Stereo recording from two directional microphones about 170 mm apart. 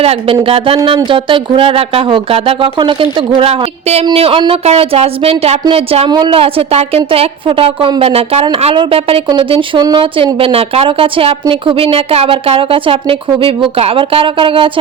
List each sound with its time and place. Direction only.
0.0 s speech: 35° right (ahead or behind)